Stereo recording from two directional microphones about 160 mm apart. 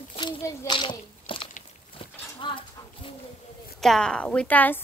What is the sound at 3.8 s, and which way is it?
Speech, 5° left (ahead or behind).